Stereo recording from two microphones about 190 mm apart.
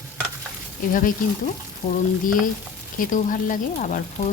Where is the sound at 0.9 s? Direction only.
45° left (ahead or behind).